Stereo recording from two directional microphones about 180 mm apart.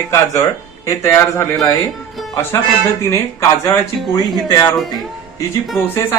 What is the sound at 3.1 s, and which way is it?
Speech, 15° left (ahead or behind).